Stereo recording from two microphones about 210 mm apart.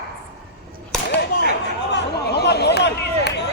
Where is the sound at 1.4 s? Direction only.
55° left (ahead or behind).